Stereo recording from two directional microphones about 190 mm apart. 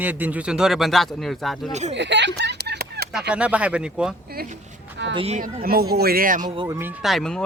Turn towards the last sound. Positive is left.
turn(degrees=0)  # may be behind; listen again after turning